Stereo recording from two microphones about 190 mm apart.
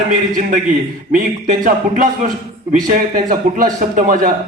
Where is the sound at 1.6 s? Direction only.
45° right (ahead or behind).